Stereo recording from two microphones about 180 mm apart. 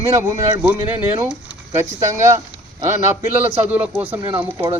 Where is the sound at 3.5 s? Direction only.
10° right (ahead or behind).